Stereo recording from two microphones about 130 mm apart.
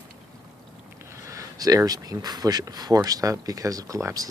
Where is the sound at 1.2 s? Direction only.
25° right (ahead or behind).